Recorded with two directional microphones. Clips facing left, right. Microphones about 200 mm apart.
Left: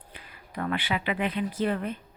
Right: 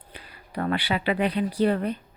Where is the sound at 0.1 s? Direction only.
35° right (ahead or behind).